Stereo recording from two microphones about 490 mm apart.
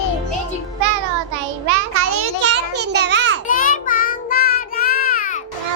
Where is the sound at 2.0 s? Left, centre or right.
Right.